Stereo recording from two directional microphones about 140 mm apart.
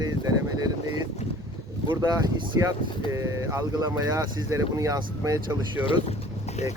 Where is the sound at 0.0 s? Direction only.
25° right (ahead or behind).